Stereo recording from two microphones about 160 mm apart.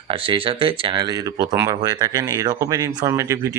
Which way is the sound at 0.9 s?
25° right (ahead or behind).